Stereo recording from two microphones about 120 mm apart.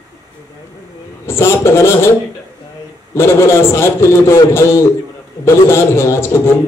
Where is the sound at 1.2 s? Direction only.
20° left (ahead or behind).